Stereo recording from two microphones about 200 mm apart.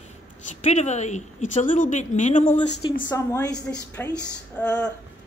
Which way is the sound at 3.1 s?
15° left (ahead or behind).